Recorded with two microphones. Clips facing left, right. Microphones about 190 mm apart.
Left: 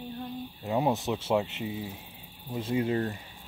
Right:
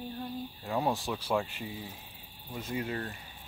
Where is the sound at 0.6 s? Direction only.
20° left (ahead or behind).